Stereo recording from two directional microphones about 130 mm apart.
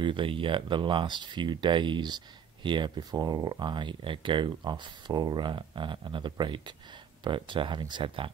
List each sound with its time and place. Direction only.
0.0 s speech: 40° right (ahead or behind)